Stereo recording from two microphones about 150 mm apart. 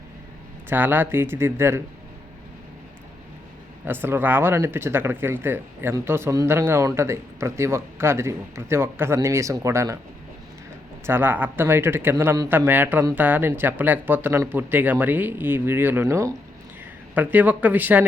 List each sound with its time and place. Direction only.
0.7 s speech: 15° right (ahead or behind)
3.8 s speech: 15° right (ahead or behind)
11.0 s speech: 15° right (ahead or behind)